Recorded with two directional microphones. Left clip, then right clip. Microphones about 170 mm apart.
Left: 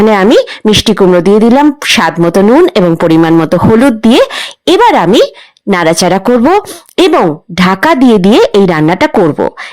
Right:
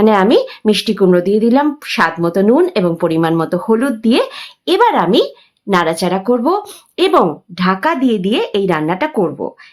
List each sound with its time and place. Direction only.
0.0 s speech: 45° left (ahead or behind)